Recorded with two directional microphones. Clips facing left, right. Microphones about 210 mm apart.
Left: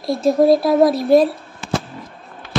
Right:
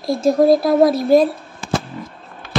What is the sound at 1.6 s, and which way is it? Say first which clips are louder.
Fireworks: right 1 dB; 45° right (ahead or behind).